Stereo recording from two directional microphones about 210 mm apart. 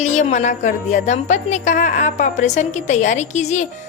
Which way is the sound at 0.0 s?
35° left (ahead or behind).